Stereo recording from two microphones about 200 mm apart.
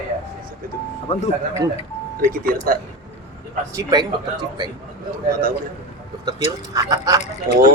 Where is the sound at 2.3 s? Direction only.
45° right (ahead or behind).